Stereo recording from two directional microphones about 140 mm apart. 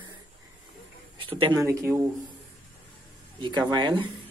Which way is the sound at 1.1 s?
35° right (ahead or behind).